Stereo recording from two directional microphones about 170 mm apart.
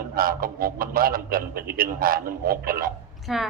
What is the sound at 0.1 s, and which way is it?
A man's voice, 60° right (ahead or behind).